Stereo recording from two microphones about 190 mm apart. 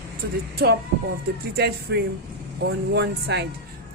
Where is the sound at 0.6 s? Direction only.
60° right (ahead or behind).